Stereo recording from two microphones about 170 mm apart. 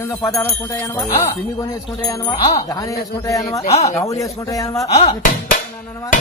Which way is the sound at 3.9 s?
20° left (ahead or behind).